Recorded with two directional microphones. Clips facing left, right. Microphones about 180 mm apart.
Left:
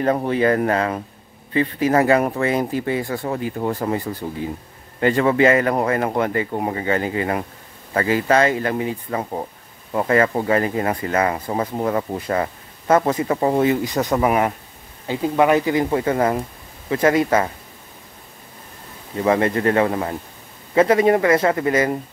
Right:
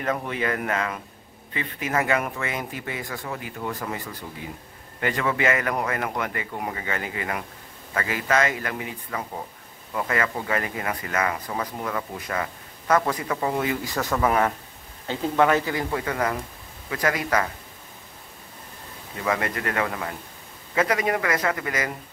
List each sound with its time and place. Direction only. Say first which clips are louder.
0.0 s speech: left 9 dB; 35° left (ahead or behind)
19.2 s speech: left 9 dB; 30° left (ahead or behind)